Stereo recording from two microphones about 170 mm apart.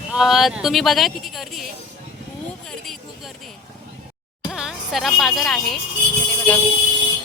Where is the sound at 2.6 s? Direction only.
Centre (ahead or behind).